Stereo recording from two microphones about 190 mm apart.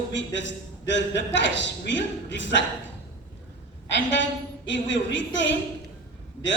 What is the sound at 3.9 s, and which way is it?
A woman's voice, 75° left (ahead or behind).